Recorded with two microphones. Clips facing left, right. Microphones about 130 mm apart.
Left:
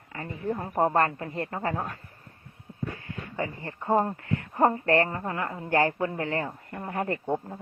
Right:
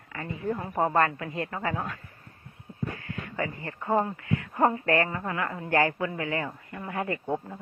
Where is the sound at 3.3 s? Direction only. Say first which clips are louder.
Even; 20° left (ahead or behind).